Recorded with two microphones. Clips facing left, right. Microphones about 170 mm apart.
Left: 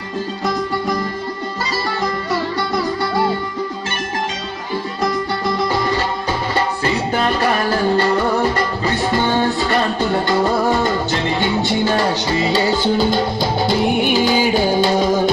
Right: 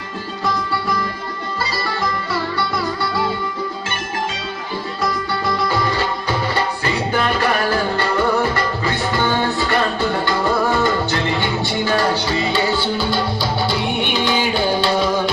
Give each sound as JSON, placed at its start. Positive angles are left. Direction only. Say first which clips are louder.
{"t": 12.5, "sound": "music", "louder": "left 5 dB", "side_deg": 40}